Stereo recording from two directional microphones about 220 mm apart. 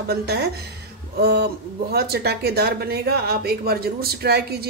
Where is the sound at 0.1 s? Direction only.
45° right (ahead or behind).